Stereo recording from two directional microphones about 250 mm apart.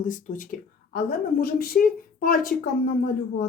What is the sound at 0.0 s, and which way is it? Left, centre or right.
Speech, left.